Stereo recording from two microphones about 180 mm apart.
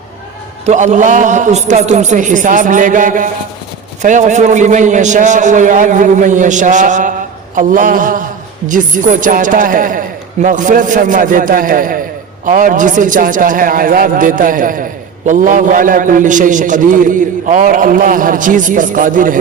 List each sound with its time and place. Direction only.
0.6 s a man's voice: 40° right (ahead or behind)